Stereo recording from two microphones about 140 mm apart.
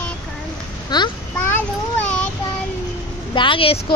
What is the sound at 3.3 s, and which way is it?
Speech, 35° left (ahead or behind).